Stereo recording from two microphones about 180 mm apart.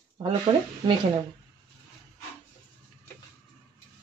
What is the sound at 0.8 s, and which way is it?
Speech, 25° right (ahead or behind).